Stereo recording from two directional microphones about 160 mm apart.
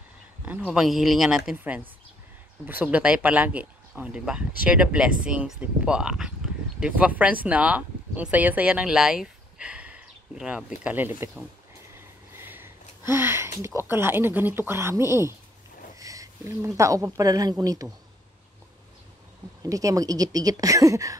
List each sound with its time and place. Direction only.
0.7 s speech: centre (ahead or behind)
12.4 s a sound: 15° right (ahead or behind)
13.6 s speech: 15° right (ahead or behind)
19.7 s a woman's voice: 20° right (ahead or behind)